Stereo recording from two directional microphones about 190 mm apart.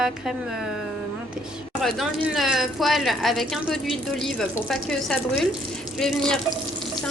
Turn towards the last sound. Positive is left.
turn(degrees=0)  # may be behind; listen again after turning